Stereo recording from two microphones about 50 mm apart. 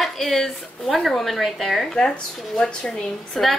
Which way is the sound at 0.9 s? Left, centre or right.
Centre.